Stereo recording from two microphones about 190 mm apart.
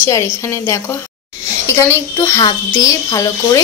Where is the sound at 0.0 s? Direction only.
15° left (ahead or behind).